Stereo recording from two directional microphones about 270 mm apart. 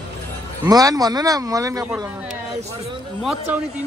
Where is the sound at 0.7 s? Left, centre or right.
Centre.